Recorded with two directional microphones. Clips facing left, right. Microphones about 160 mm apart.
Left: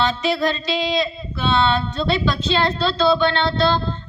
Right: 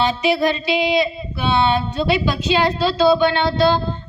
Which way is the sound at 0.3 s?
20° right (ahead or behind).